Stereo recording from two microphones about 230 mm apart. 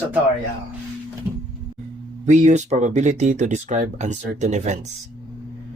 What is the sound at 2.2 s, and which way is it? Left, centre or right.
Speech, right.